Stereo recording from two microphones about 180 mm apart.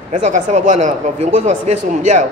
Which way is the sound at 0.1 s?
40° right (ahead or behind).